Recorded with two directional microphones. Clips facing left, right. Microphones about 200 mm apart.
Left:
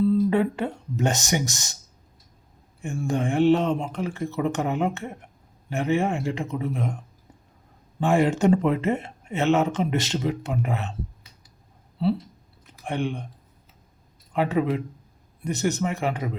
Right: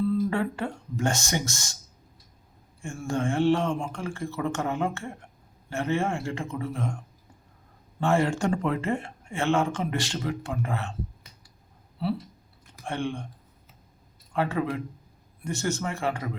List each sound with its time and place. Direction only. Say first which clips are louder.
0.1 s speech: left 5 dB; 20° left (ahead or behind)
2.8 s a man's voice: left 2 dB; 20° left (ahead or behind)
8.0 s speech: left 4 dB; 15° left (ahead or behind)
12.8 s speech: left 3 dB; 15° left (ahead or behind)
14.3 s a man's voice: left 4 dB; 20° left (ahead or behind)